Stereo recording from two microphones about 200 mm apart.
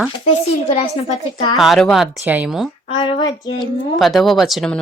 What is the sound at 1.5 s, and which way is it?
Speech, centre (ahead or behind).